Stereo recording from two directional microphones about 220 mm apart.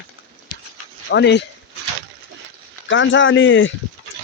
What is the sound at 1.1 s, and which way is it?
Speech, 50° left (ahead or behind).